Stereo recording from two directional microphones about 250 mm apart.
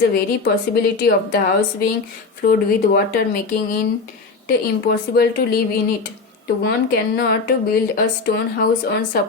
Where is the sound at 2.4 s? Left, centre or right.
Left.